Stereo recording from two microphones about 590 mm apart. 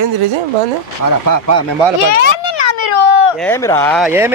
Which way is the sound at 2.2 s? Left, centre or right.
Left.